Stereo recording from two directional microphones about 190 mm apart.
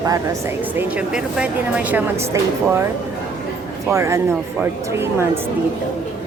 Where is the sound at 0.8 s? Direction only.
5° right (ahead or behind).